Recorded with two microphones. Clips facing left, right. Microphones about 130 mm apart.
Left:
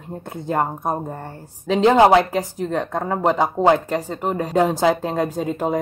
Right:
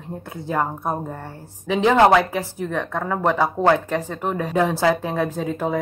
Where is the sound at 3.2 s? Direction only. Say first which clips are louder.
Left 1 dB; 15° left (ahead or behind).